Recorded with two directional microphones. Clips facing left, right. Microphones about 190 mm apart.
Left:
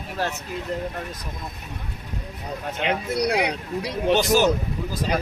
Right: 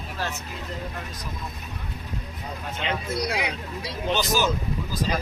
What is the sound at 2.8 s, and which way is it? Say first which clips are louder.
Speech: left 4 dB; 65° left (ahead or behind).